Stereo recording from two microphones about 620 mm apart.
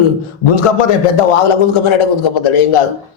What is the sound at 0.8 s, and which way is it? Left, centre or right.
A man's voice, left.